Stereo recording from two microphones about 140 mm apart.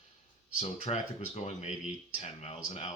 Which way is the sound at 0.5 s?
45° left (ahead or behind).